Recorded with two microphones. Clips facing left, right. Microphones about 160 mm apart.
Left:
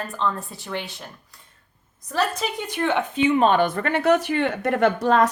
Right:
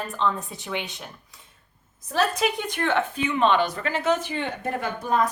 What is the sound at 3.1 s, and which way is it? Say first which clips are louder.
Speech: left 7 dB; 30° left (ahead or behind).